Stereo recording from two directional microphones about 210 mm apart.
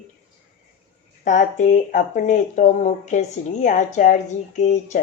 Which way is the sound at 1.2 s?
35° left (ahead or behind).